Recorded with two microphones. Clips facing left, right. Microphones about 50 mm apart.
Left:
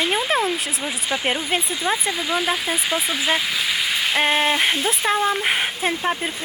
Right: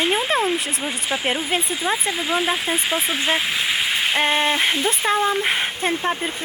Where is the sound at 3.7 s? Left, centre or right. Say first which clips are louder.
Right 1 dB; right.